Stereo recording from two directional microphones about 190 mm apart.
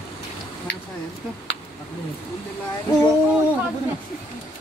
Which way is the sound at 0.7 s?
70° left (ahead or behind).